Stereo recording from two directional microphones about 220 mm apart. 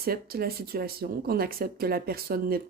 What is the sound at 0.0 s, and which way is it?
Speech, 45° right (ahead or behind).